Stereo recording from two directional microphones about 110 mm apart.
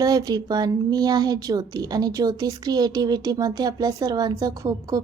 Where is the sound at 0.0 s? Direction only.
35° right (ahead or behind).